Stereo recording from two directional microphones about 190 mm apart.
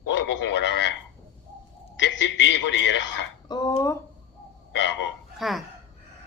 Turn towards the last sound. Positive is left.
turn(degrees=0)  # may be behind; listen again after turning